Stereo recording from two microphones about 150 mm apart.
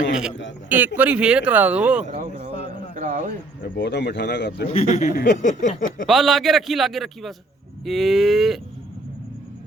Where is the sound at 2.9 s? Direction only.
55° right (ahead or behind).